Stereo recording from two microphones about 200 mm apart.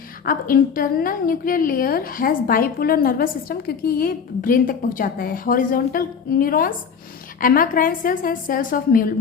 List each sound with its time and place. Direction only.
0.3 s a woman's voice: 45° left (ahead or behind)